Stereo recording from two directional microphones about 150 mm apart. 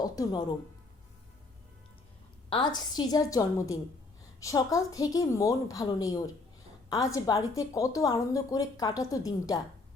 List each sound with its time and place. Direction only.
0.0 s a woman's voice: 25° left (ahead or behind)
2.5 s a woman's voice: 30° left (ahead or behind)